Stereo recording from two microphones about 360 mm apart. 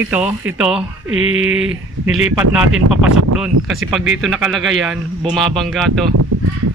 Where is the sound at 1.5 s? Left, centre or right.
Centre.